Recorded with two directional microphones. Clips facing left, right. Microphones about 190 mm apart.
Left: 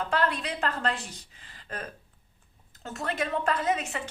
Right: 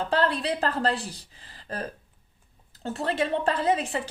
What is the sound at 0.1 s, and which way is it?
A woman's voice, 30° right (ahead or behind).